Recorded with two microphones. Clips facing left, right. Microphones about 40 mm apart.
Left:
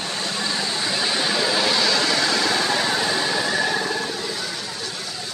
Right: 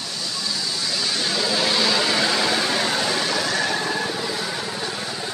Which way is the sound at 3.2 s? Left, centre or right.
Centre.